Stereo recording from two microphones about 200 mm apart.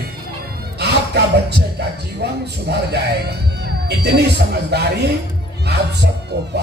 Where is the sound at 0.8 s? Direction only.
55° right (ahead or behind).